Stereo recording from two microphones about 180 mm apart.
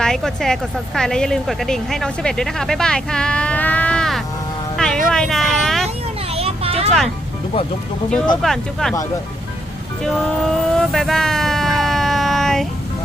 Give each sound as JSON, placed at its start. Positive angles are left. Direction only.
{"t": 0.0, "sound": "speech", "side_deg": 0}
{"t": 6.3, "sound": "a sound", "side_deg": -35}
{"t": 8.4, "sound": "speech", "side_deg": 0}
{"t": 10.0, "sound": "vehicle", "side_deg": 5}